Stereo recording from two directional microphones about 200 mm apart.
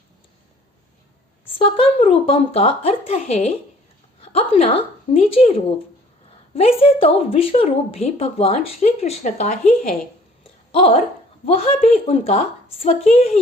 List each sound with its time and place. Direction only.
1.5 s a woman's voice: 30° left (ahead or behind)
10.4 s a sound: 30° left (ahead or behind)
11.4 s a woman's voice: 30° left (ahead or behind)